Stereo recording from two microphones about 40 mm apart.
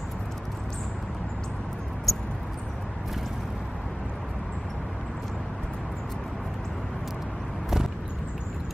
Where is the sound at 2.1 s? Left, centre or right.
Centre.